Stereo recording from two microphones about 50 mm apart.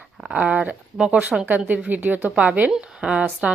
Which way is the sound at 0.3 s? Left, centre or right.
Right.